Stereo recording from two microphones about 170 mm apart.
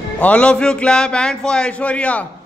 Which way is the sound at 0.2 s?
5° left (ahead or behind).